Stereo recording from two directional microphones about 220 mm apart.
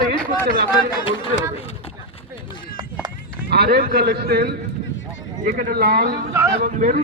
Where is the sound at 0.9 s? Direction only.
20° left (ahead or behind).